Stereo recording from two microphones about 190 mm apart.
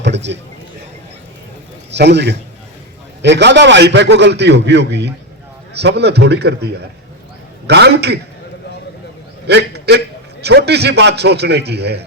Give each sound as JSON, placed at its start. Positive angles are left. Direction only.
{"t": 0.0, "sound": "speech", "side_deg": -65}
{"t": 1.9, "sound": "a man's voice", "side_deg": -65}
{"t": 7.7, "sound": "a man's voice", "side_deg": -60}
{"t": 9.5, "sound": "a man's voice", "side_deg": -60}